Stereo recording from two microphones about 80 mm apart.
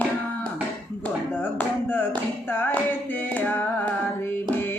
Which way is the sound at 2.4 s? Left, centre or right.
Left.